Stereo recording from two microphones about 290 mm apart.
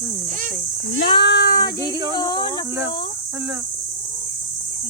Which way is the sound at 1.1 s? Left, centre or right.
Left.